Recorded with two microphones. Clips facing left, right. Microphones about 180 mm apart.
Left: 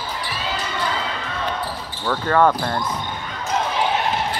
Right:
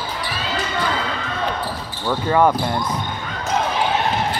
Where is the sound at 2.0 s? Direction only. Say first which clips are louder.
Right 1 dB; 15° right (ahead or behind).